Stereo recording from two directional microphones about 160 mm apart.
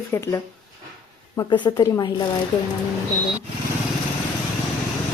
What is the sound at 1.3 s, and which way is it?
Speech, 25° left (ahead or behind).